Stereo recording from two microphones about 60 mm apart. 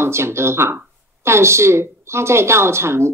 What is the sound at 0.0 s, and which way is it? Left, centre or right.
Speech, right.